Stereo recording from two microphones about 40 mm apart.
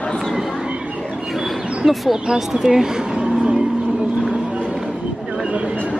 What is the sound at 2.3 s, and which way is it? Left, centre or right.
Speech, centre.